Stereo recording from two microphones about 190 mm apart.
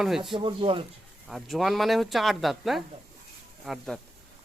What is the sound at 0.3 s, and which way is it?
Speech, 25° right (ahead or behind).